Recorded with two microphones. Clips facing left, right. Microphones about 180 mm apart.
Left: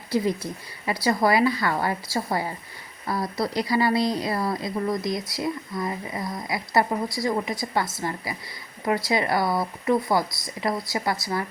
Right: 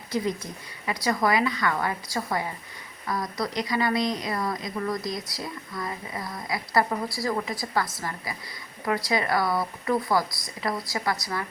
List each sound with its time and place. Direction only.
0.9 s a woman's voice: 30° left (ahead or behind)